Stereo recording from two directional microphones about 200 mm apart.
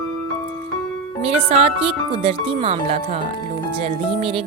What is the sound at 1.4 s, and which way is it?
Speech, 30° right (ahead or behind).